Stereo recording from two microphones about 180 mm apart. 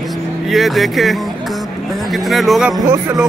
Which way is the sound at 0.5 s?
Centre (ahead or behind).